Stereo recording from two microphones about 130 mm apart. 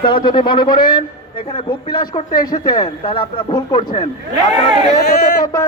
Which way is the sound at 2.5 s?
55° left (ahead or behind).